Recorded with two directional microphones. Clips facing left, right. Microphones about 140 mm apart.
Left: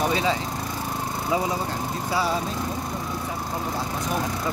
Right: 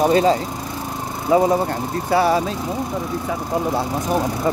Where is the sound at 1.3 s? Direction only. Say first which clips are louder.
Right 10 dB; 50° right (ahead or behind).